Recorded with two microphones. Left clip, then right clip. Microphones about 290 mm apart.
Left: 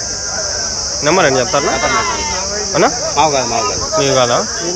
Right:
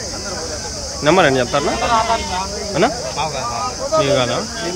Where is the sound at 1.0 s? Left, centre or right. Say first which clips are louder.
Left 1 dB; centre.